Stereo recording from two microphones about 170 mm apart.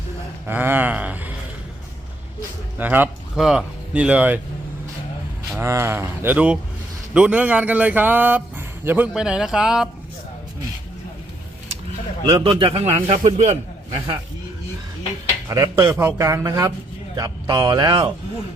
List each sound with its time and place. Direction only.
0.4 s speech: 10° right (ahead or behind)
2.7 s speech: 10° right (ahead or behind)
5.5 s speech: 15° right (ahead or behind)
12.3 s a man's voice: 30° right (ahead or behind)
15.4 s speech: 15° right (ahead or behind)